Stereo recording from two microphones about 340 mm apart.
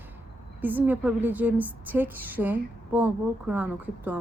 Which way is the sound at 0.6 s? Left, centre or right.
Centre.